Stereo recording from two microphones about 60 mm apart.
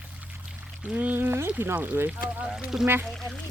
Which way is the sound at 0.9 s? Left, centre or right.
Right.